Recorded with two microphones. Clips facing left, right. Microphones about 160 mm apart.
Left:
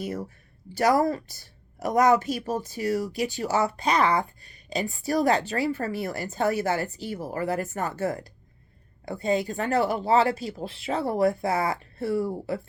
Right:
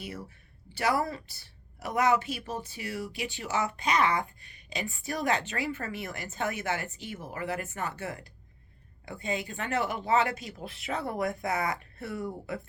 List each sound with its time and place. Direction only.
0.0 s a woman's voice: 40° left (ahead or behind)